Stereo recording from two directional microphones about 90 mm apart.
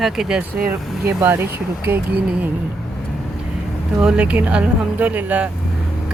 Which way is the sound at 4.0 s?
10° right (ahead or behind).